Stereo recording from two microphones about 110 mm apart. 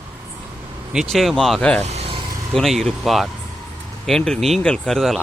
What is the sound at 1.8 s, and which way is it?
Vehicle, 65° right (ahead or behind).